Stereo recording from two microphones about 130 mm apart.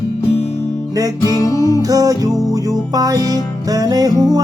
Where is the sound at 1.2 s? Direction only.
25° left (ahead or behind).